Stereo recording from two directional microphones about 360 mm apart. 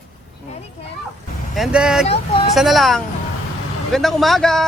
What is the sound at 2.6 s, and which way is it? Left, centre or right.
Speech, centre.